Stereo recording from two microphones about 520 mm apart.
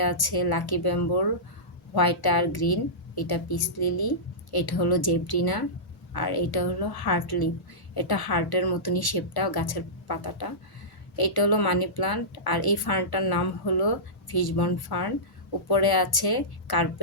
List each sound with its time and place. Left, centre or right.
0.0 s a woman's voice: left